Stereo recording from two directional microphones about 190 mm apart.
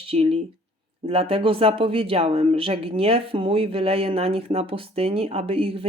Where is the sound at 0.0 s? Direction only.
30° right (ahead or behind).